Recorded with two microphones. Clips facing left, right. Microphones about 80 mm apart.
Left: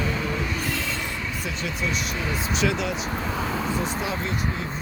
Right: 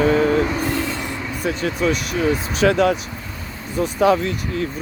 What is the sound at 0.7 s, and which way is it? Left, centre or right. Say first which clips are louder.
Train: right 5 dB; centre.